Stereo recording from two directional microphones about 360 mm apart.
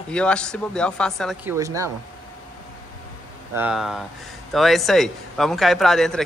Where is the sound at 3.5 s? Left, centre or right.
Centre.